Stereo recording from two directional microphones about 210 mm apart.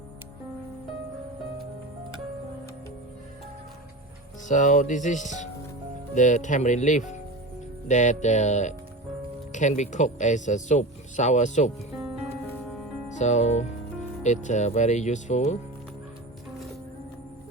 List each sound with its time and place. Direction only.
4.4 s speech: 35° left (ahead or behind)
13.1 s speech: 35° left (ahead or behind)